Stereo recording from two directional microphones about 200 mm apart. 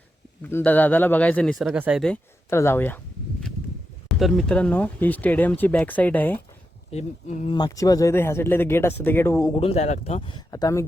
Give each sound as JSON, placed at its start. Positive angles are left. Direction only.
{"t": 0.4, "sound": "speech", "side_deg": 10}
{"t": 2.5, "sound": "speech", "side_deg": 15}
{"t": 4.2, "sound": "speech", "side_deg": 0}
{"t": 6.9, "sound": "speech", "side_deg": 35}
{"t": 7.5, "sound": "speech", "side_deg": 20}
{"t": 9.6, "sound": "speech", "side_deg": 30}